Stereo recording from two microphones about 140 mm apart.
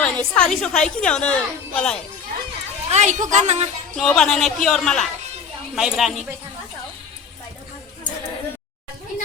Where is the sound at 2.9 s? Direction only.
55° right (ahead or behind).